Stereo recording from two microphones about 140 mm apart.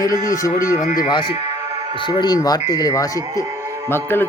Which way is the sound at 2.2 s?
30° left (ahead or behind).